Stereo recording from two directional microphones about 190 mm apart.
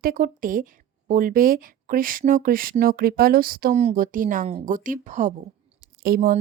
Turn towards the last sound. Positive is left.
turn(degrees=-50)  # may be behind; listen again after turning